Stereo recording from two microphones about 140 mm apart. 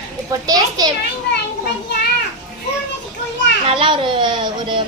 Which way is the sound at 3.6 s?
40° right (ahead or behind).